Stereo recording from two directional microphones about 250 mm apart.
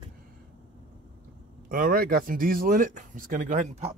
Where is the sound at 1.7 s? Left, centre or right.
Right.